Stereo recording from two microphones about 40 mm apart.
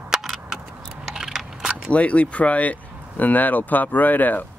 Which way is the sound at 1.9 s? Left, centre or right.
Left.